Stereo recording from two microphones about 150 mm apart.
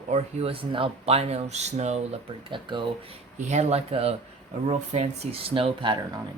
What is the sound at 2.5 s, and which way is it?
Speech, 35° right (ahead or behind).